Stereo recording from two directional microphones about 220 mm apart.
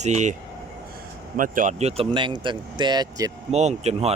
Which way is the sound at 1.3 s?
35° right (ahead or behind).